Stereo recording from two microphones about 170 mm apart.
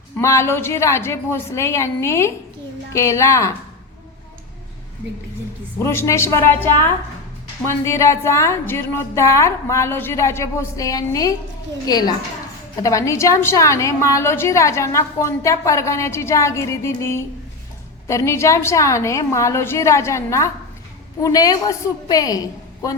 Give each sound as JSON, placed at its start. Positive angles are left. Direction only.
{"t": 0.2, "sound": "a woman's voice", "side_deg": 15}
{"t": 5.8, "sound": "a woman's voice", "side_deg": 15}
{"t": 7.7, "sound": "a woman's voice", "side_deg": 15}